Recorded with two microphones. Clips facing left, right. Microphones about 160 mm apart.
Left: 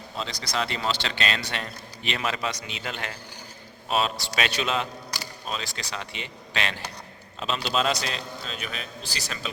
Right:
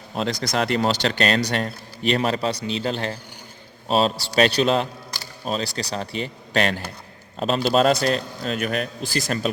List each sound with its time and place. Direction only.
0.2 s a man's voice: 50° right (ahead or behind)